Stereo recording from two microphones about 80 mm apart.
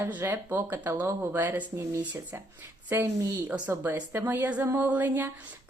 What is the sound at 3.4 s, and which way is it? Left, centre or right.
A woman's voice, centre.